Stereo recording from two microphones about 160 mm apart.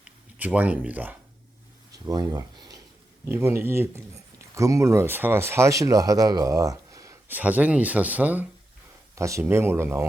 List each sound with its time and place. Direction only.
0.0 s speech: 10° right (ahead or behind)
2.0 s speech: 25° right (ahead or behind)
3.2 s speech: 15° right (ahead or behind)